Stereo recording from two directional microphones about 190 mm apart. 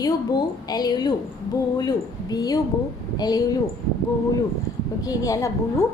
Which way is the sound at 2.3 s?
20° left (ahead or behind).